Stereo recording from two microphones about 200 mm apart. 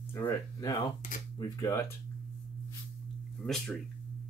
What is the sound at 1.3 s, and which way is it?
Speech, 15° left (ahead or behind).